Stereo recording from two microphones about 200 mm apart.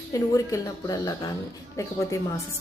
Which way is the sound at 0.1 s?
15° left (ahead or behind).